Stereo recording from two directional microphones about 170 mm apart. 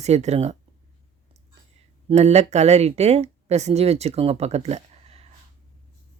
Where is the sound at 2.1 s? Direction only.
40° right (ahead or behind).